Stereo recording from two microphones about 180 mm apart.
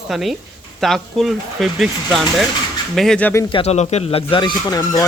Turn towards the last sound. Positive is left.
turn(degrees=20)  # may be behind; listen again after turning